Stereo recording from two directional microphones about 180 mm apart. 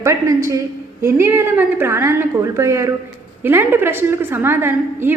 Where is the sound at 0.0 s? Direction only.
15° right (ahead or behind).